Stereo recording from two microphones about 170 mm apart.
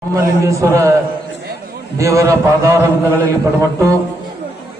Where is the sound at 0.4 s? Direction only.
20° right (ahead or behind).